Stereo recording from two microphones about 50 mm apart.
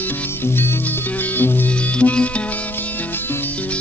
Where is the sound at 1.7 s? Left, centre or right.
Left.